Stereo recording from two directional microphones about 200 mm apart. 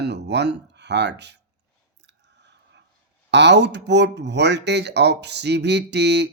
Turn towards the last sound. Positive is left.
turn(degrees=-60)  # may be behind; listen again after turning